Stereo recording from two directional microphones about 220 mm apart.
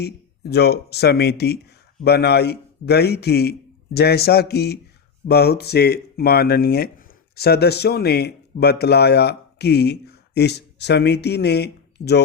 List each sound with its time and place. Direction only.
0.0 s speech: 50° left (ahead or behind)